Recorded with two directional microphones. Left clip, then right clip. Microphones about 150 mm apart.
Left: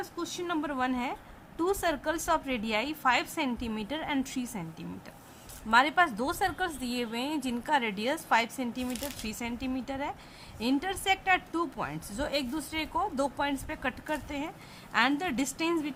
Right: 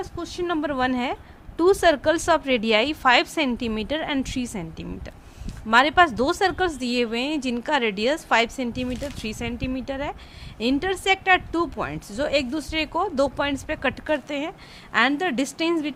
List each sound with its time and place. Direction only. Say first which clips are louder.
0.0 s a woman's voice: right 6 dB; 30° right (ahead or behind)